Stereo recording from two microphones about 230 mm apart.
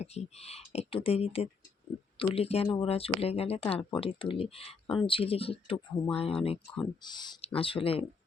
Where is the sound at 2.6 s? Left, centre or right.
Centre.